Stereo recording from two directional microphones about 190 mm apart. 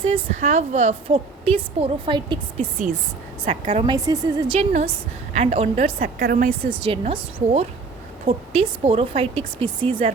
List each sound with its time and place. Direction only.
0.0 s a woman's voice: 35° right (ahead or behind)
3.4 s a woman's voice: 40° right (ahead or behind)
3.8 s a woman's voice: 20° right (ahead or behind)
5.3 s a woman's voice: 35° right (ahead or behind)
6.0 s speech: 50° right (ahead or behind)
6.7 s a woman's voice: 25° right (ahead or behind)